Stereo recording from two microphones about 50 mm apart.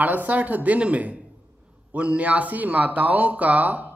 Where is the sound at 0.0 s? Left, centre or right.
Right.